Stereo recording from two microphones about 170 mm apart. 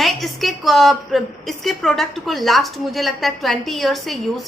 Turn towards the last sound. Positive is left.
turn(degrees=0)  # may be behind; listen again after turning